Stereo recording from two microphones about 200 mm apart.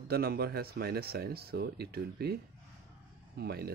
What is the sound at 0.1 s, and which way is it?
Speech, 50° right (ahead or behind).